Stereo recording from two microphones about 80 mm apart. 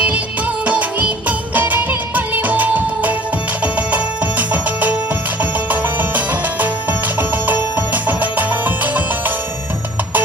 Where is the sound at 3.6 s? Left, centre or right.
Centre.